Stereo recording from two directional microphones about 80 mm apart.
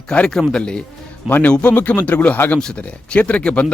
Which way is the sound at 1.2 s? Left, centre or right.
Left.